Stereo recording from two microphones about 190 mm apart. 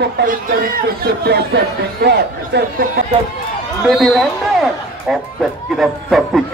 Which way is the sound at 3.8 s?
Centre (ahead or behind).